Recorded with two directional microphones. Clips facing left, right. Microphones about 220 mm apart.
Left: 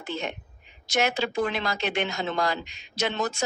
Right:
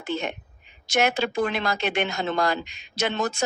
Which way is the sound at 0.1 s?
55° right (ahead or behind).